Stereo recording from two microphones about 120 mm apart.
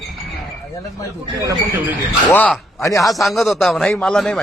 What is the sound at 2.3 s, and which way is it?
Speech, 10° left (ahead or behind).